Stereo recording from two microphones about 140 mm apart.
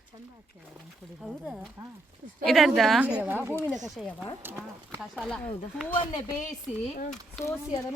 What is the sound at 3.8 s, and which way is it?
Speech, centre (ahead or behind).